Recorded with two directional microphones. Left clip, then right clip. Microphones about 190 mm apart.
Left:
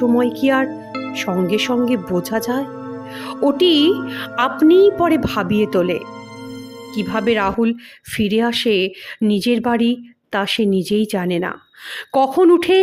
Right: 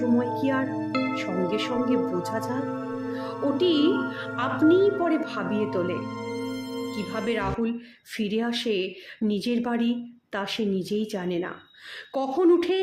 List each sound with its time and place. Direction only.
0.2 s speech: 40° left (ahead or behind)